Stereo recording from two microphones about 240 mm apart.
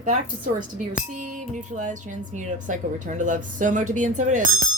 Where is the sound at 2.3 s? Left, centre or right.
Right.